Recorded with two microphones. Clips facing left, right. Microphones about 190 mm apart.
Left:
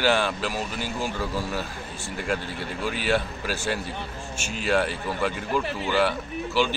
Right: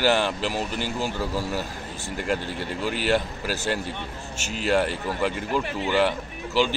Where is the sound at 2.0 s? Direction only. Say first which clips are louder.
Right 2 dB; 40° right (ahead or behind).